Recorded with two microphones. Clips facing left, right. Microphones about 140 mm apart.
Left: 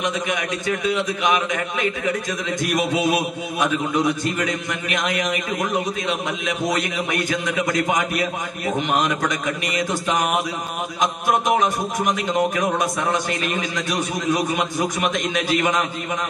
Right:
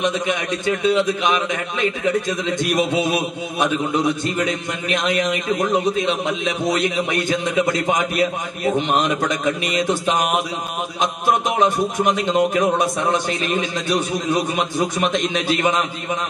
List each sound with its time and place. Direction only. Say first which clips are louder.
0.0 s a man's voice: right 3 dB; 25° right (ahead or behind)
11.6 s a man's voice: right 4 dB; 25° right (ahead or behind)